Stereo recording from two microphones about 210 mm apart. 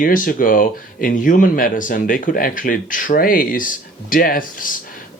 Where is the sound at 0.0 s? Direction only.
40° left (ahead or behind).